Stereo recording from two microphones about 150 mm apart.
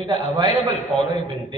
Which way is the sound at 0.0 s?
30° right (ahead or behind).